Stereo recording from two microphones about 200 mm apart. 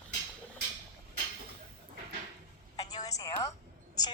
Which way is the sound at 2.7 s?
20° left (ahead or behind).